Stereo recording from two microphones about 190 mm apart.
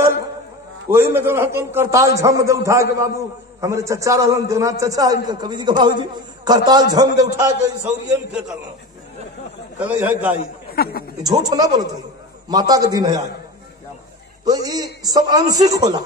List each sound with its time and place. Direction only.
0.8 s a man's voice: 10° right (ahead or behind)
9.8 s a man's voice: 10° right (ahead or behind)
10.7 s speech: 55° left (ahead or behind)
11.2 s a man's voice: 20° right (ahead or behind)
14.4 s a man's voice: 20° right (ahead or behind)